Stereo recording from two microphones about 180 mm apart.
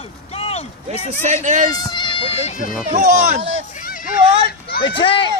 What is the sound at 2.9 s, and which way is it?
Speech, 45° right (ahead or behind).